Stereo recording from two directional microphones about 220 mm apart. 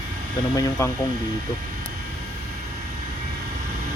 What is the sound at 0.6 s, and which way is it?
Speech, 10° left (ahead or behind).